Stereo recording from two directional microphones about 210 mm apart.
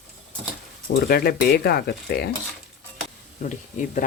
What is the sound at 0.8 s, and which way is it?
Speech, 45° left (ahead or behind).